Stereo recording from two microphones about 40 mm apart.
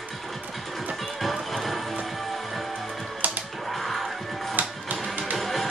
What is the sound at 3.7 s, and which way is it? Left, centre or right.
Music, centre.